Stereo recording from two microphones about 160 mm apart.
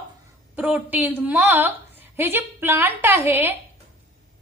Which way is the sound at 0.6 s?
10° right (ahead or behind).